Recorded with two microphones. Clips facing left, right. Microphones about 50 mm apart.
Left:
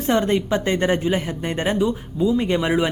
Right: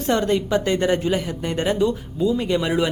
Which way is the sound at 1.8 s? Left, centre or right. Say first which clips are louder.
Even; centre.